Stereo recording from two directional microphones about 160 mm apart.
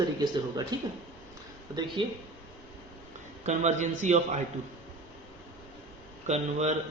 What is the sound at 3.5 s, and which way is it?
Speech, 45° right (ahead or behind).